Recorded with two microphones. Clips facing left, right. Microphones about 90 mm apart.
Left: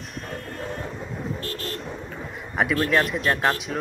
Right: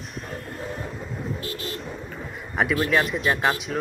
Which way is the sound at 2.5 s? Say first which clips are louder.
Even; centre (ahead or behind).